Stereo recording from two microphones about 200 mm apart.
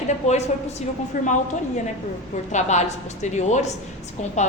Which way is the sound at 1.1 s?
40° left (ahead or behind).